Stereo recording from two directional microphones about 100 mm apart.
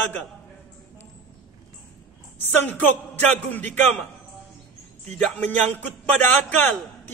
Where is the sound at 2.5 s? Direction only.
20° left (ahead or behind).